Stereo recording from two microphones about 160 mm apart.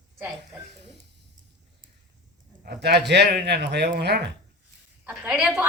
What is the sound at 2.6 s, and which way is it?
Speech, 90° right.